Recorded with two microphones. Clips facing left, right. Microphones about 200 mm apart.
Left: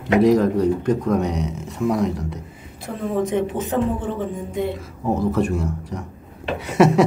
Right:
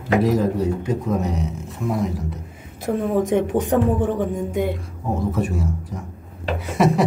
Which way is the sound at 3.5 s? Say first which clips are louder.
Right 3 dB; 15° right (ahead or behind).